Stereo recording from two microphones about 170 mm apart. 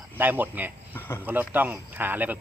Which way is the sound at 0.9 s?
15° left (ahead or behind).